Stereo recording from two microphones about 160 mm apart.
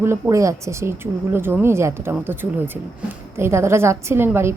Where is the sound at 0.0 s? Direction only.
20° right (ahead or behind).